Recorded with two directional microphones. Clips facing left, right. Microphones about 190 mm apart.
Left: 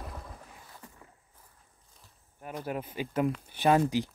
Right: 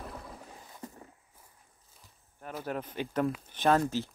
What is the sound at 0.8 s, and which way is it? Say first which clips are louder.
Walk: right 12 dB; 40° right (ahead or behind).